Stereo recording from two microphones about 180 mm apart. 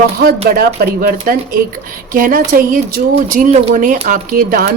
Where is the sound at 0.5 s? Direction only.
55° right (ahead or behind).